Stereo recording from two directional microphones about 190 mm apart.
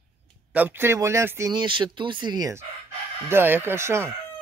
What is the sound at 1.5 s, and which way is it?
Speech, 25° right (ahead or behind).